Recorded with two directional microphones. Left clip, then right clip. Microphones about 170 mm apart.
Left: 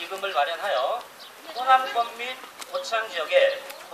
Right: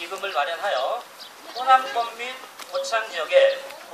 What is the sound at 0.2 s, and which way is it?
A man's voice, 5° left (ahead or behind).